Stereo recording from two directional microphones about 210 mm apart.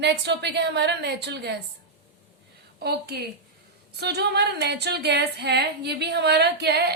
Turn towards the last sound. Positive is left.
turn(degrees=-50)  # may be behind; listen again after turning